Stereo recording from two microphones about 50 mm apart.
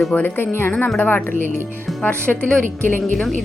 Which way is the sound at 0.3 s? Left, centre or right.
Left.